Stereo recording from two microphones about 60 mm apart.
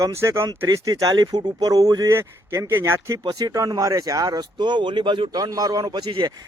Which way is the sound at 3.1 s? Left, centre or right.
Right.